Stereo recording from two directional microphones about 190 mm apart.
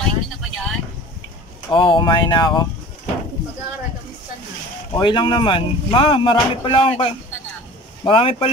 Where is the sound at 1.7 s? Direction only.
25° left (ahead or behind).